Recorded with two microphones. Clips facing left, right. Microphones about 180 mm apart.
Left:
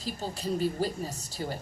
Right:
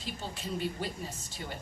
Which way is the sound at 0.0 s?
40° left (ahead or behind).